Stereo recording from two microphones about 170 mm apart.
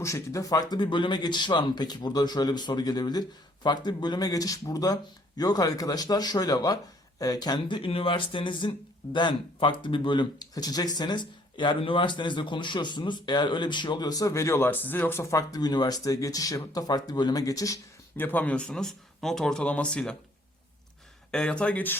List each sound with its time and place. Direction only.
0.0 s speech: 20° left (ahead or behind)
21.3 s speech: 5° left (ahead or behind)